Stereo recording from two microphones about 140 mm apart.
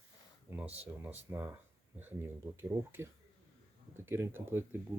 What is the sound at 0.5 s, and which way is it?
Speech, 10° right (ahead or behind).